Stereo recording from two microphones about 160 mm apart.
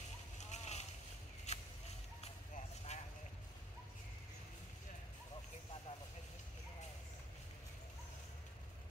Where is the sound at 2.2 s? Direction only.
45° left (ahead or behind).